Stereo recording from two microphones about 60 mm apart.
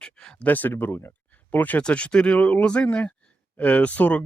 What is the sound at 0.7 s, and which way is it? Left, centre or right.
Speech, left.